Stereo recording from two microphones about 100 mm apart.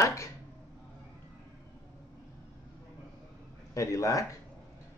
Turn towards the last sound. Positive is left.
turn(degrees=35)  # may be behind; listen again after turning